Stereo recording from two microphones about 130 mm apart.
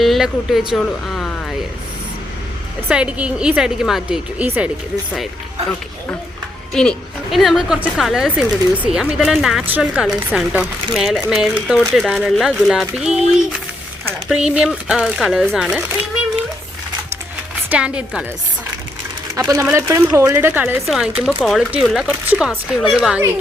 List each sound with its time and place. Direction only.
0.0 s speech: centre (ahead or behind)
2.9 s a woman's voice: 10° right (ahead or behind)
6.7 s speech: centre (ahead or behind)
14.3 s speech: 10° right (ahead or behind)
17.7 s a woman's voice: 10° right (ahead or behind)
19.4 s speech: 25° right (ahead or behind)
20.8 s speech: centre (ahead or behind)